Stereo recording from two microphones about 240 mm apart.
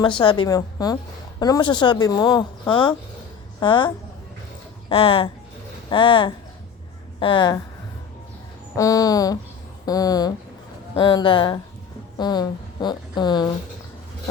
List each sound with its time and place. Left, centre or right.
0.2 s speech: centre
8.7 s a woman's voice: centre